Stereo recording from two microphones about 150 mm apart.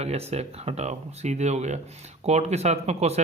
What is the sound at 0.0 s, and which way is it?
Speech, 45° right (ahead or behind).